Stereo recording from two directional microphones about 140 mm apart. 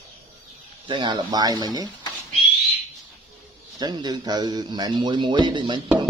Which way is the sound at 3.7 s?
30° right (ahead or behind).